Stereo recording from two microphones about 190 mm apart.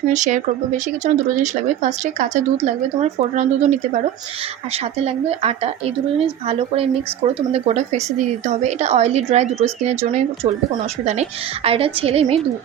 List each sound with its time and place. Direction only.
0.1 s a woman's voice: 40° right (ahead or behind)
5.0 s a woman's voice: 35° right (ahead or behind)